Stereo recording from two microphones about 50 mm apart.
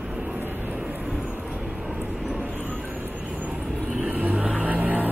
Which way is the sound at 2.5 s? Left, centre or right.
Right.